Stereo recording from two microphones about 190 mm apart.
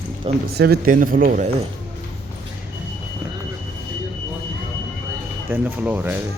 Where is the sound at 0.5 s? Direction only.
55° right (ahead or behind).